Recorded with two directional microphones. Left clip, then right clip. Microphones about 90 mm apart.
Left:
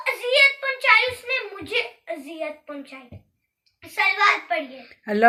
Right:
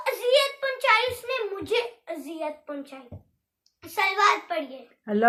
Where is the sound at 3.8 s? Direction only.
35° right (ahead or behind).